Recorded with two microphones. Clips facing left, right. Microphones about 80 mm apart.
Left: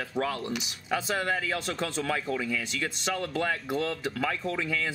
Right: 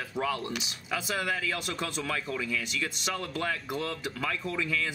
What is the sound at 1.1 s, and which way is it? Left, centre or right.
Speech, left.